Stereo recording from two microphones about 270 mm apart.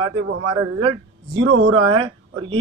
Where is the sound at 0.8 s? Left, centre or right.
Right.